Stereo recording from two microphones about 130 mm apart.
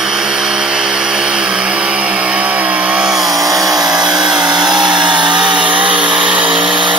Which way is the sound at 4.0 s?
35° right (ahead or behind).